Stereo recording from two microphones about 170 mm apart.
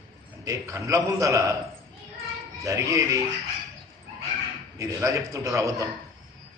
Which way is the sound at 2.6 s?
20° right (ahead or behind).